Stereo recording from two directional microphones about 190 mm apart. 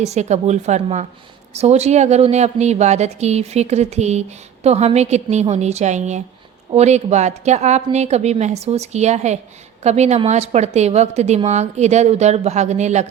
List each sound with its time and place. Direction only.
0.0 s speech: 35° right (ahead or behind)